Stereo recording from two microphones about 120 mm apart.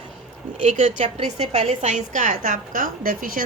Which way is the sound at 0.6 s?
80° right.